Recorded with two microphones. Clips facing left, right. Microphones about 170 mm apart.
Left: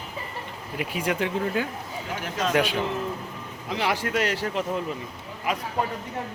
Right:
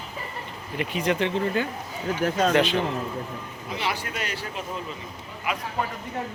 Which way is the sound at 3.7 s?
75° left (ahead or behind).